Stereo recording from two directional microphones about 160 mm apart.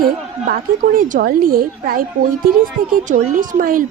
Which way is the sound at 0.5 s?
60° right (ahead or behind).